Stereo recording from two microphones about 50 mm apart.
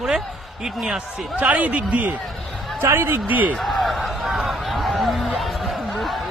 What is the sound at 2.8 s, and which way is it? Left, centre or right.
Speech, right.